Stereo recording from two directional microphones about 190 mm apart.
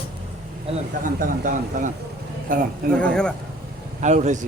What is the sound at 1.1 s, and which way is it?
Speech, 45° right (ahead or behind).